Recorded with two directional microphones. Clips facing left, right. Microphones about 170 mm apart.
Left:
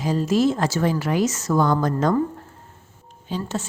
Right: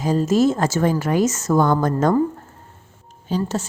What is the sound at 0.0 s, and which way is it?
A woman's voice, 45° right (ahead or behind).